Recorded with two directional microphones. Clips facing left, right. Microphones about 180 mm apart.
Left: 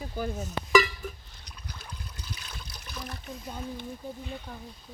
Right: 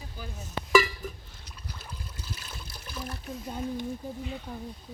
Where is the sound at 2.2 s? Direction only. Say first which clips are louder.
Right 1 dB; 5° right (ahead or behind).